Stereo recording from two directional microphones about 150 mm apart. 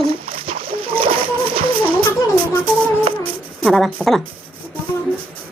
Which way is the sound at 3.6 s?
5° left (ahead or behind).